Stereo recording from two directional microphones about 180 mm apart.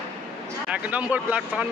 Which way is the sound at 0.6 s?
5° right (ahead or behind).